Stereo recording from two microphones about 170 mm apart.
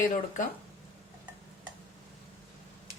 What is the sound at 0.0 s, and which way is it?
Speech, 50° left (ahead or behind).